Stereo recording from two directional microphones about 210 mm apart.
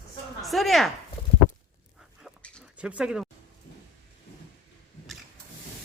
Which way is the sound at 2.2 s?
5° left (ahead or behind).